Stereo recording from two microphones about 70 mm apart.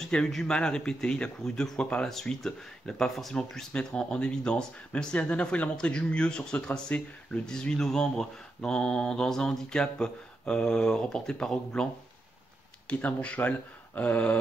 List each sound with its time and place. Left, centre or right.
0.0 s speech: centre